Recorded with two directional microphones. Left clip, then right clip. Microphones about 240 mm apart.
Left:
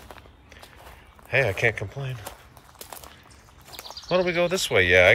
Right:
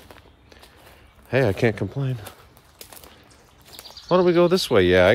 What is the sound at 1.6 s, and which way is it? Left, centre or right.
Speech, right.